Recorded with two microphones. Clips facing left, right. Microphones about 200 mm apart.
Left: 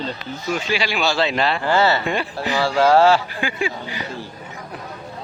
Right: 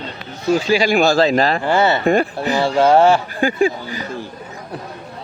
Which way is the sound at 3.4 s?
40° right (ahead or behind).